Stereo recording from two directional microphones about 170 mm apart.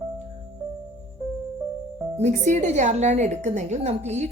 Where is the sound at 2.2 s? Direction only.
45° right (ahead or behind).